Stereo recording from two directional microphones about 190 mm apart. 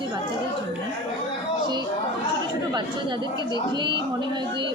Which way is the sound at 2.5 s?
25° right (ahead or behind).